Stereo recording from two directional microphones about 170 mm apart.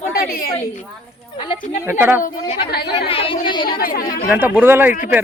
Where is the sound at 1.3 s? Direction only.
30° left (ahead or behind).